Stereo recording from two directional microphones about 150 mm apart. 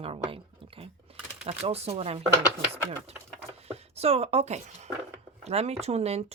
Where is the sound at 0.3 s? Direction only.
40° right (ahead or behind).